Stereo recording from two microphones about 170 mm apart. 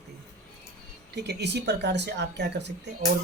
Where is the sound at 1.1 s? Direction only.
80° right.